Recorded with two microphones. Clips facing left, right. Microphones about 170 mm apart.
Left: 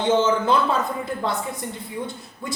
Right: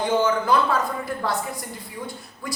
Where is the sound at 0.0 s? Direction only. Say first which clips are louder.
Left 2 dB; 25° left (ahead or behind).